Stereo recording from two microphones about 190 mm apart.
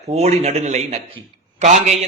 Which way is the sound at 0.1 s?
35° right (ahead or behind).